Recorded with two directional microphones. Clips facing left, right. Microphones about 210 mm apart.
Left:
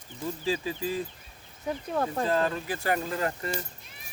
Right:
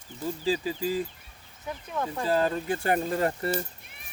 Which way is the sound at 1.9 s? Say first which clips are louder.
Left 2 dB; 40° left (ahead or behind).